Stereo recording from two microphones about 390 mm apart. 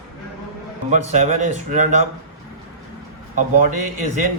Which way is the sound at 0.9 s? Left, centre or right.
Centre.